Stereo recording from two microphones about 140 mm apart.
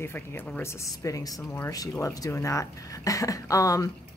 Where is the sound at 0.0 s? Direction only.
15° left (ahead or behind).